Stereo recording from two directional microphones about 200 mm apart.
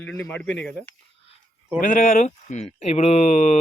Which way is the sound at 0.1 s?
5° left (ahead or behind).